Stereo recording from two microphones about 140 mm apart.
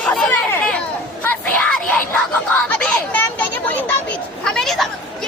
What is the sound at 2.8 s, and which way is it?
Children playing, 10° left (ahead or behind).